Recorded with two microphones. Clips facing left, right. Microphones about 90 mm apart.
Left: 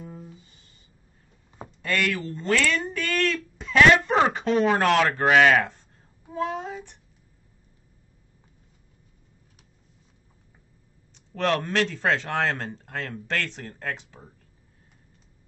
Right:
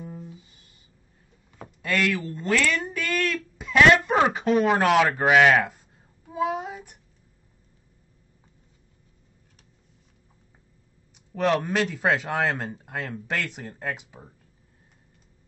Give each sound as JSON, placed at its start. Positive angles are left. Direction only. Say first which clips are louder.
{"t": 0.0, "sound": "a sound", "louder": "right 2 dB", "side_deg": 0}
{"t": 1.8, "sound": "speech", "louder": "right 1 dB", "side_deg": -5}
{"t": 6.3, "sound": "child singing", "louder": "right 2 dB", "side_deg": -10}
{"t": 11.1, "sound": "speech", "louder": "right 2 dB", "side_deg": -10}